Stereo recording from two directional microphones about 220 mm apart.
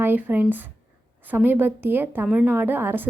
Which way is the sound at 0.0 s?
10° right (ahead or behind).